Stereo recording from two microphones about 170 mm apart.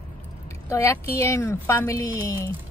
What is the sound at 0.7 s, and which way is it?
Speech, 15° left (ahead or behind).